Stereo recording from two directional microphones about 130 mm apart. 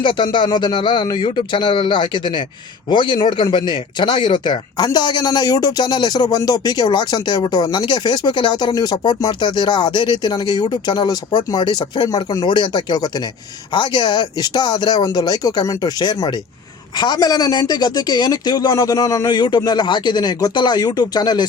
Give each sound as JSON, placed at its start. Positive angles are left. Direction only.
{"t": 0.0, "sound": "speech", "side_deg": 35}